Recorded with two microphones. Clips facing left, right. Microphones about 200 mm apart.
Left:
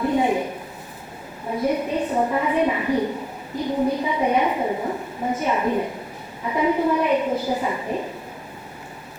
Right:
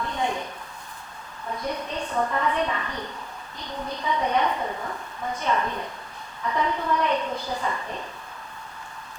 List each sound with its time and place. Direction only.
0.0 s a sound: 10° left (ahead or behind)
1.5 s a woman's voice: 5° left (ahead or behind)
2.1 s a woman's voice: 20° left (ahead or behind)
2.4 s a woman's voice: 10° left (ahead or behind)
4.8 s a woman's voice: 20° left (ahead or behind)
5.3 s a woman's voice: 5° left (ahead or behind)